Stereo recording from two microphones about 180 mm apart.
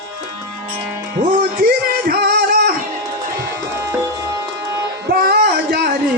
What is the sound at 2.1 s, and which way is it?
Music, 55° right (ahead or behind).